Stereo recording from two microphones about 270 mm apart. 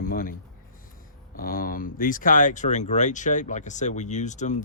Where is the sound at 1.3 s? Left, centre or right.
Left.